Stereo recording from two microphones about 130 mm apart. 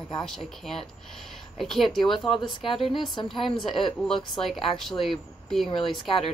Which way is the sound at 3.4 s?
Centre (ahead or behind).